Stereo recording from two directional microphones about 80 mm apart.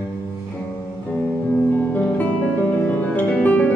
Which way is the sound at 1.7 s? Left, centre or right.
Left.